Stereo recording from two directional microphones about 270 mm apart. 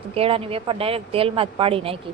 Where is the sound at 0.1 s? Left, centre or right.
Right.